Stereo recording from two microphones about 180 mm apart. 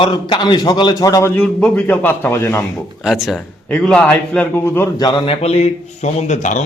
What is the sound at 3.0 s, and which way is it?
A man's voice, centre (ahead or behind).